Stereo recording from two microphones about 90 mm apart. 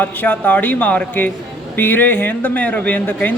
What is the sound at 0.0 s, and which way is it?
A man's voice, 20° left (ahead or behind).